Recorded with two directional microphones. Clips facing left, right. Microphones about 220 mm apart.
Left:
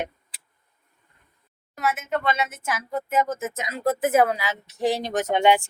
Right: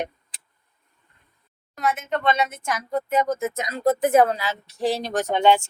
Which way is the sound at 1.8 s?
5° left (ahead or behind).